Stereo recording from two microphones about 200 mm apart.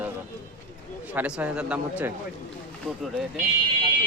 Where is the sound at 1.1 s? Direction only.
5° right (ahead or behind).